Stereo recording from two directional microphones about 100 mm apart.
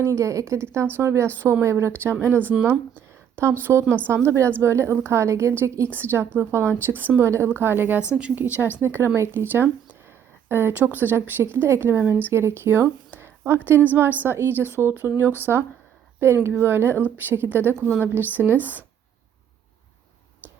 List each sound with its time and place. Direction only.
0.0 s a woman's voice: 30° right (ahead or behind)